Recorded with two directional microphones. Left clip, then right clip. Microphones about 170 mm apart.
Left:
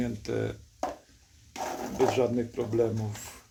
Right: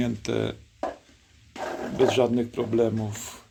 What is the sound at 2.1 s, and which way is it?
Speech, 55° right (ahead or behind).